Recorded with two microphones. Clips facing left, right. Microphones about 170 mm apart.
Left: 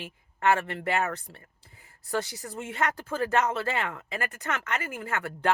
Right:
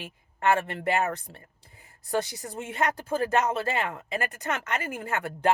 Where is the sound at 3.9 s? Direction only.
35° right (ahead or behind).